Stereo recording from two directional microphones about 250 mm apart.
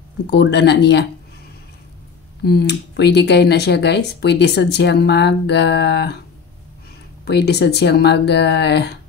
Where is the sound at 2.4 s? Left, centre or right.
Left.